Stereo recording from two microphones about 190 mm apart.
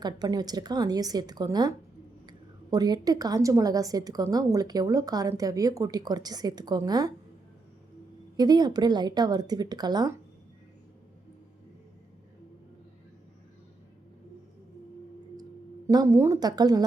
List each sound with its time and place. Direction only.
0.0 s a woman's voice: 20° right (ahead or behind)
8.4 s a woman's voice: 20° right (ahead or behind)
15.9 s a woman's voice: 15° right (ahead or behind)